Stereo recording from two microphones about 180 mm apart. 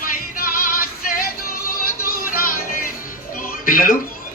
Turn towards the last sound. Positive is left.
turn(degrees=50)  # may be behind; listen again after turning